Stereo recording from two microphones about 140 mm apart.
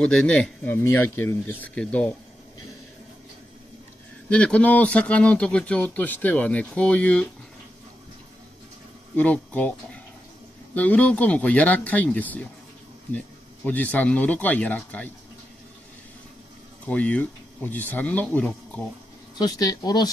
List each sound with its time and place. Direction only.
0.0 s speech: 10° left (ahead or behind)
4.3 s speech: 10° left (ahead or behind)
9.1 s speech: 10° left (ahead or behind)
13.7 s speech: 10° left (ahead or behind)
16.8 s speech: 10° left (ahead or behind)
19.4 s speech: 25° left (ahead or behind)